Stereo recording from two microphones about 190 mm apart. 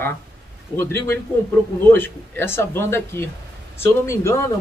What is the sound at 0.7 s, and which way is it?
A man's voice, 10° left (ahead or behind).